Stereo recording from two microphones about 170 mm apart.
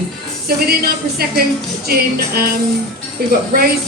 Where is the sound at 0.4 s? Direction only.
65° right (ahead or behind).